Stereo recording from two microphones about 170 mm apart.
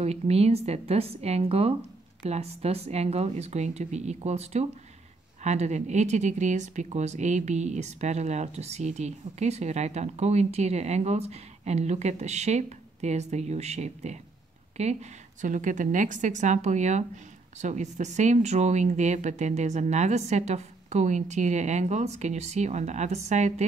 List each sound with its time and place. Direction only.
0.0 s speech: 40° right (ahead or behind)